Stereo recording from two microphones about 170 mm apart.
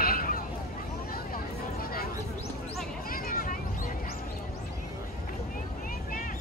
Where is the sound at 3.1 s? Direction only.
55° left (ahead or behind).